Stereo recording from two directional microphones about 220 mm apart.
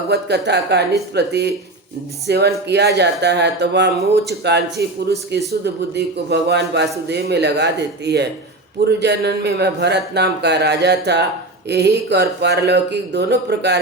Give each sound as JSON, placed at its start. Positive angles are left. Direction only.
{"t": 0.1, "sound": "a man's voice", "side_deg": -50}